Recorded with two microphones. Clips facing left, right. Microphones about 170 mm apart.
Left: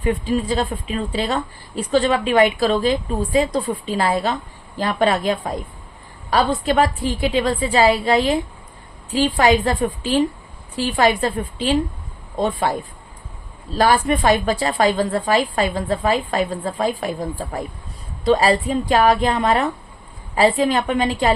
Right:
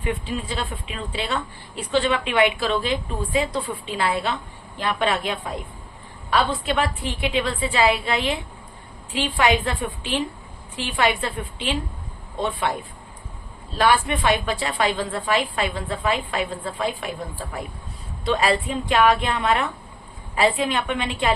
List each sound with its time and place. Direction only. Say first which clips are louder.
0.0 s a woman's voice: left 7 dB; 40° left (ahead or behind)
13.7 s a woman's voice: left 3 dB; 40° left (ahead or behind)